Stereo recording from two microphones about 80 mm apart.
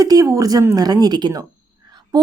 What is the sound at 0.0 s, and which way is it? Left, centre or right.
Speech, right.